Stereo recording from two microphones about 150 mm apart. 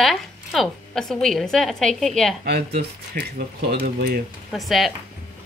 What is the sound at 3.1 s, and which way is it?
Speech, 75° right (ahead or behind).